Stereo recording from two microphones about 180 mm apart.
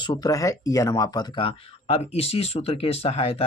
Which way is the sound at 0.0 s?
20° left (ahead or behind).